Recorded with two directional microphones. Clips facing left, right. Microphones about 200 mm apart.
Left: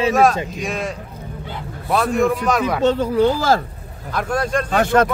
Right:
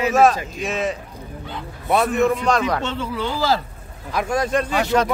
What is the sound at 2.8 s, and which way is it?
Speech, 40° left (ahead or behind).